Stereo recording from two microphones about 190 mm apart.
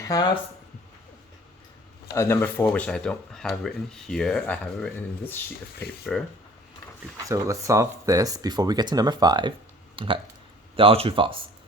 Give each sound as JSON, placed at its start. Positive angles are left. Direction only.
{"t": 0.0, "sound": "speech", "side_deg": 20}
{"t": 2.1, "sound": "speech", "side_deg": 10}
{"t": 7.3, "sound": "speech", "side_deg": -15}